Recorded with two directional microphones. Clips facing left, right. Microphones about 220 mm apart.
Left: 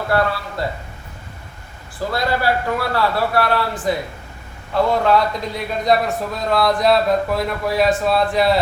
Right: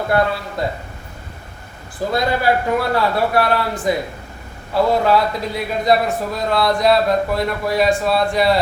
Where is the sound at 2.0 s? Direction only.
20° right (ahead or behind).